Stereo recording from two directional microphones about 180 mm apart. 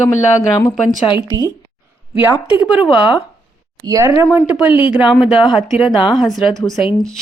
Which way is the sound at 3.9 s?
15° right (ahead or behind).